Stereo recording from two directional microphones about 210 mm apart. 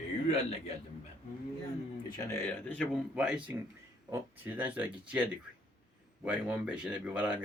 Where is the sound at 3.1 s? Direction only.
5° right (ahead or behind).